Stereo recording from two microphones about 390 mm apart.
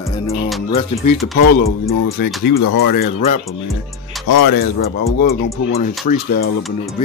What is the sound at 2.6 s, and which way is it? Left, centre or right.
Speech, left.